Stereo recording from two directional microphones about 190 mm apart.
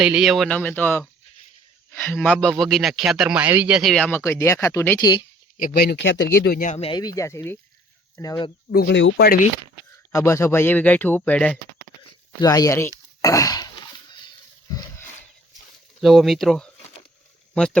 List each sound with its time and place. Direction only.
0.0 s speech: 5° right (ahead or behind); by 5.0 s 15° left (ahead or behind)
5.7 s speech: 60° left (ahead or behind)
6.4 s speech: 50° left (ahead or behind)
6.9 s speech: 20° left (ahead or behind)
8.7 s speech: 60° left (ahead or behind)
10.1 s speech: 15° left (ahead or behind)
12.4 s speech: 20° left (ahead or behind)
13.2 s a sound: 20° left (ahead or behind)
16.0 s speech: centre (ahead or behind)